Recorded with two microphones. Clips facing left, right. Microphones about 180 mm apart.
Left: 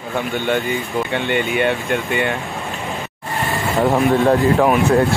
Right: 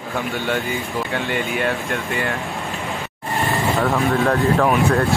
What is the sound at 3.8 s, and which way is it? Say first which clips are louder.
Speech: left 6 dB; 20° left (ahead or behind).